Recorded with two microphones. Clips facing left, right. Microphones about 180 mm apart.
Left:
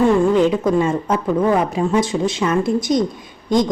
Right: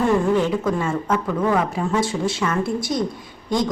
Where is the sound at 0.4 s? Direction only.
20° left (ahead or behind).